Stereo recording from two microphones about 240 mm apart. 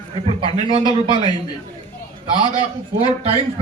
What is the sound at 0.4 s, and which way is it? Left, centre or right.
Speech, right.